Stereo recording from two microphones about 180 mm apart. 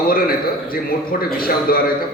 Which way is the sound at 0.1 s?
55° left (ahead or behind).